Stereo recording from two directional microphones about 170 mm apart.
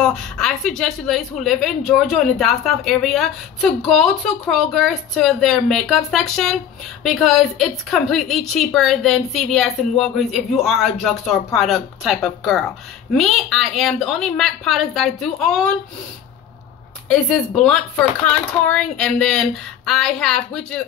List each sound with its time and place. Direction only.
0.0 s a woman's voice: 5° left (ahead or behind)
18.2 s a woman's voice: 5° left (ahead or behind)